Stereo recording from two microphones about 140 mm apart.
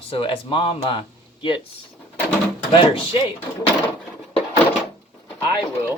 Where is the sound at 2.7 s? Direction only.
35° left (ahead or behind).